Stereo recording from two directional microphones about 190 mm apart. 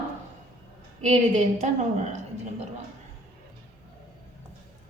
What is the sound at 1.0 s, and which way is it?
A woman's voice, 35° right (ahead or behind).